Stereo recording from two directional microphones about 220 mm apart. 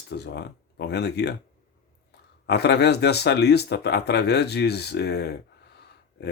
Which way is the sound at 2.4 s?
50° left (ahead or behind).